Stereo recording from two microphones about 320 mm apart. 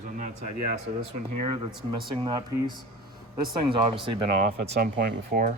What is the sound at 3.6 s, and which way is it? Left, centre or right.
Speech, centre.